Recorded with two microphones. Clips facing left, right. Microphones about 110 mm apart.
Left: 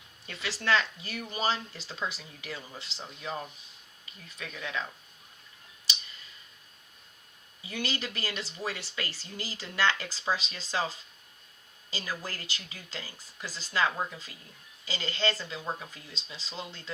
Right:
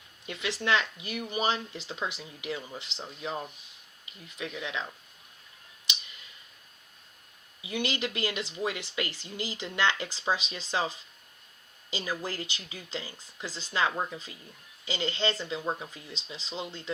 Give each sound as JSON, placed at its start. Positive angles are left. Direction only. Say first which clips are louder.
{"t": 0.3, "sound": "speech", "louder": "right 1 dB", "side_deg": -20}
{"t": 4.4, "sound": "speech", "louder": "right 1 dB", "side_deg": -20}
{"t": 7.6, "sound": "speech", "louder": "right 3 dB", "side_deg": -20}